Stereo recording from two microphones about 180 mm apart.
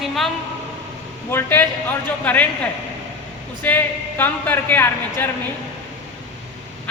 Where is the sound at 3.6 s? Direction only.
10° left (ahead or behind).